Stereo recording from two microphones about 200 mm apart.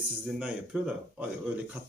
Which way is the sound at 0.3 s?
5° right (ahead or behind).